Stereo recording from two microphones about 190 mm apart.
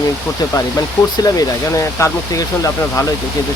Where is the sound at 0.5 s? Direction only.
20° left (ahead or behind).